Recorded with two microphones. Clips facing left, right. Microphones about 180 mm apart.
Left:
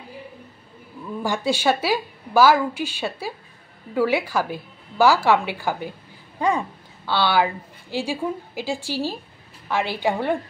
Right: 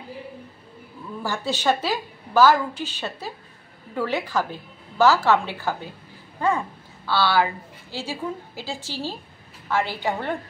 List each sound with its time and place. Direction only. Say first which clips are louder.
1.2 s a woman's voice: left 2 dB; 15° left (ahead or behind)